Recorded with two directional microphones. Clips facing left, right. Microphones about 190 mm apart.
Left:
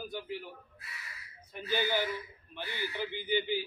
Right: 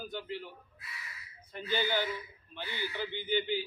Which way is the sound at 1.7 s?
15° left (ahead or behind).